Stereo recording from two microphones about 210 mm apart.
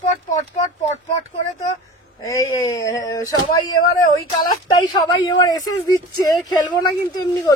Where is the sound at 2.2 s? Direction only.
15° left (ahead or behind).